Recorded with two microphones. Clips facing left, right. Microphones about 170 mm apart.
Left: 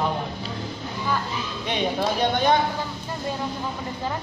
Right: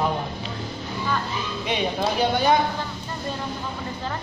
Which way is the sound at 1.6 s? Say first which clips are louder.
Even; 5° right (ahead or behind).